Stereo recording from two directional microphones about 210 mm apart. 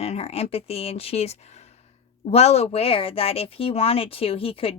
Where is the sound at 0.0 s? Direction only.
30° left (ahead or behind).